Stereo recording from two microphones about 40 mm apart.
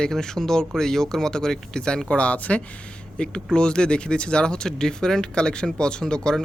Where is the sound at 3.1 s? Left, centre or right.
Left.